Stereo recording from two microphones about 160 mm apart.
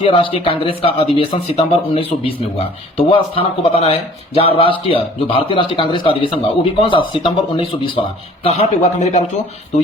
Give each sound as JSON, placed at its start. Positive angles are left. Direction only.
{"t": 0.0, "sound": "speech", "side_deg": 35}
{"t": 8.4, "sound": "a man's voice", "side_deg": 45}